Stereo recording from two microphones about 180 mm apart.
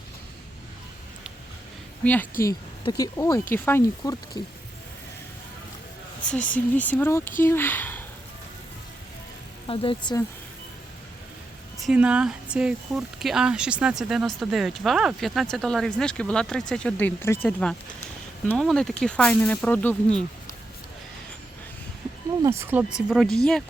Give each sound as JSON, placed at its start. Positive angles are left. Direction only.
{"t": 2.4, "sound": "speech", "side_deg": 20}
{"t": 6.5, "sound": "speech", "side_deg": 10}
{"t": 9.6, "sound": "speech", "side_deg": 30}
{"t": 11.9, "sound": "speech", "side_deg": -5}
{"t": 22.4, "sound": "speech", "side_deg": -15}
{"t": 23.0, "sound": "speech", "side_deg": 0}